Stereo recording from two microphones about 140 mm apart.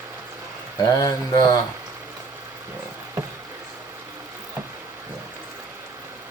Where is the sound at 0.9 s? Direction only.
25° left (ahead or behind).